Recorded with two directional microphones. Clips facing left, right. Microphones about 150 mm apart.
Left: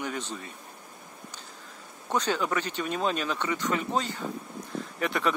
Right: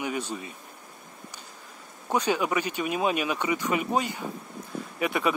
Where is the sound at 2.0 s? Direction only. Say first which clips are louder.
Right 2 dB; 10° right (ahead or behind).